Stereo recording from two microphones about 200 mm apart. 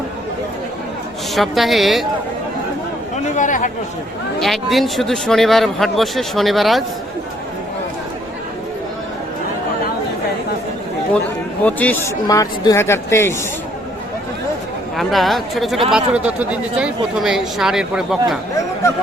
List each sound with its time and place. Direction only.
1.4 s speech: centre (ahead or behind)
3.3 s chatter: 40° left (ahead or behind)
4.4 s speech: centre (ahead or behind)
11.6 s speech: 10° left (ahead or behind)
14.9 s speech: centre (ahead or behind)